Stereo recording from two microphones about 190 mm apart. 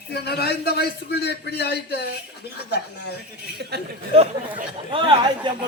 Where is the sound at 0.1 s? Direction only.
60° left (ahead or behind).